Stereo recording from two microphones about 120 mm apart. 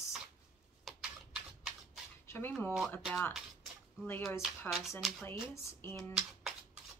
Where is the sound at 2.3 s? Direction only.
15° left (ahead or behind).